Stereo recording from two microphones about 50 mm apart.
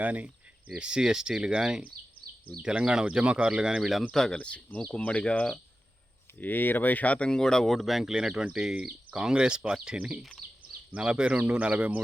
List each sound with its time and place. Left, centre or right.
0.0 s speech: right
0.8 s speech: centre
4.1 s speech: centre
6.4 s speech: left
7.3 s speech: centre; by 11.9 s right